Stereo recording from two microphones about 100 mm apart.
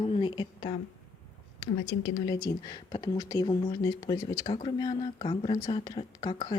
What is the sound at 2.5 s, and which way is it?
Speech, 40° left (ahead or behind).